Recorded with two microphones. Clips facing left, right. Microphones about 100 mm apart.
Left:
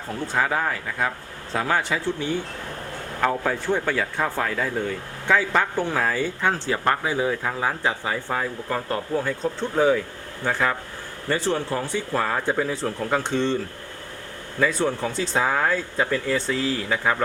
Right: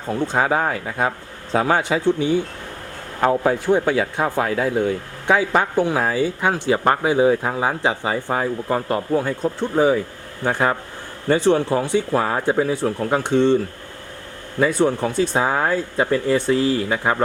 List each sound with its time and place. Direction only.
0.1 s speech: 25° right (ahead or behind)
14.8 s speech: 10° right (ahead or behind)